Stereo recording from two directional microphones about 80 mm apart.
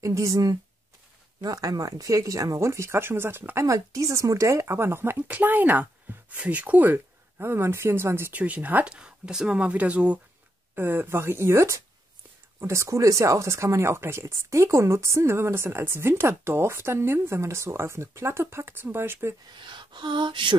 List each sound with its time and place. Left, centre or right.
0.0 s speech: right
3.6 s speech: right
8.3 s speech: centre
19.5 s a sound: right